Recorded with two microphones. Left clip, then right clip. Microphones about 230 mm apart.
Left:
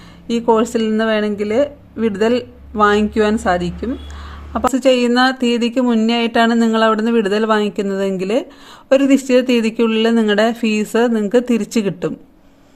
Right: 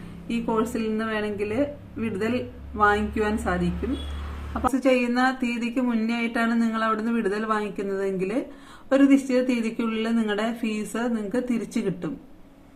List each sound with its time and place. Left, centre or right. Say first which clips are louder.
0.3 s speech: left 11 dB; left
4.6 s speech: left 8 dB; left